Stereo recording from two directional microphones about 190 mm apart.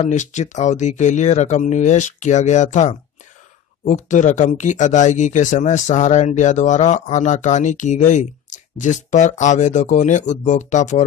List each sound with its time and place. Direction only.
0.0 s speech: 40° left (ahead or behind)